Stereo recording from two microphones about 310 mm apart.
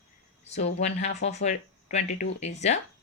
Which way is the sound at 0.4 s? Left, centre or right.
Left.